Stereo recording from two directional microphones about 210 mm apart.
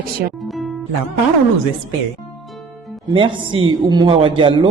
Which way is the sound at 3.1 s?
25° right (ahead or behind).